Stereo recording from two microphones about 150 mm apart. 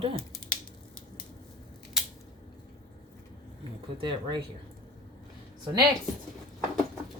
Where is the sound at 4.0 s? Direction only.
35° right (ahead or behind).